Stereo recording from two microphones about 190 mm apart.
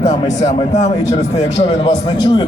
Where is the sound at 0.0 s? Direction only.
35° left (ahead or behind).